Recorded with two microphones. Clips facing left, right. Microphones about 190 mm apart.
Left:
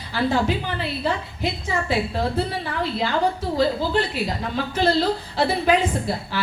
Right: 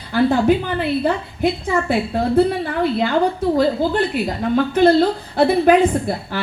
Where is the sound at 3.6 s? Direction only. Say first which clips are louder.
Right 1 dB; 55° right (ahead or behind).